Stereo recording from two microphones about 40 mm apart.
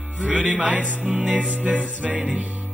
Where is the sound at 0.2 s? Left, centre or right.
Right.